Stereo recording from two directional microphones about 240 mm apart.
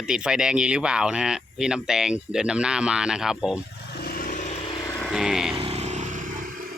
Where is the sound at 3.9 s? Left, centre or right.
Left.